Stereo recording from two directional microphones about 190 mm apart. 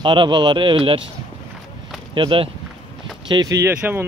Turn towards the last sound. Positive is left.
turn(degrees=-10)  # may be behind; listen again after turning